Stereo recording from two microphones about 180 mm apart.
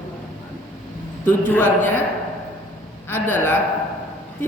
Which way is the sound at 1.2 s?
10° left (ahead or behind).